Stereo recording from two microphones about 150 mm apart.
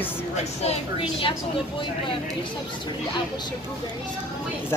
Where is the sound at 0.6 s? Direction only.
40° left (ahead or behind).